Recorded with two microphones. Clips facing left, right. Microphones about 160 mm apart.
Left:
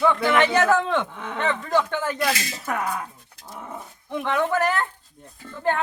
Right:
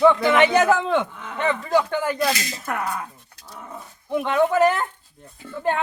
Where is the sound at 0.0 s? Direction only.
20° right (ahead or behind).